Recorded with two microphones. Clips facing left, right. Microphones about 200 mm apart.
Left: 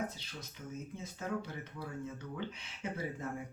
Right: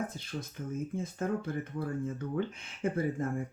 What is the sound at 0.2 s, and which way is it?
Speech, 50° right (ahead or behind).